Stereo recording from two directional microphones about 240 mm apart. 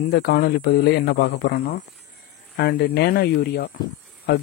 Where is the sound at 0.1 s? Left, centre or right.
Left.